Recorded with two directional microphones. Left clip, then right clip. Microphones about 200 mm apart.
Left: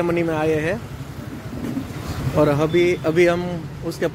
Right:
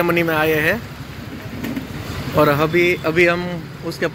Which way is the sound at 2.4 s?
10° left (ahead or behind).